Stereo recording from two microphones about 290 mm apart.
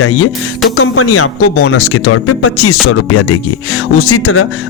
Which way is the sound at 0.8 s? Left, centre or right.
Left.